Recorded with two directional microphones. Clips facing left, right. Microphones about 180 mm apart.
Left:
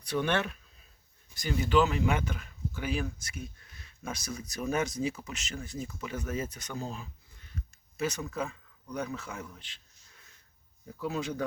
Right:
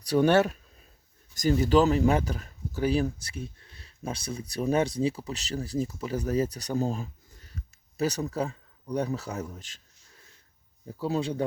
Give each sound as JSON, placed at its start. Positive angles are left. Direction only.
{"t": 0.0, "sound": "speech", "side_deg": -35}
{"t": 10.9, "sound": "speech", "side_deg": -30}